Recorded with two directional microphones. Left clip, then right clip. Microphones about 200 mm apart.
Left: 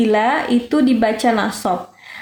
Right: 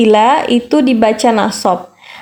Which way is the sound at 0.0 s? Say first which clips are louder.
Right 7 dB; 35° right (ahead or behind).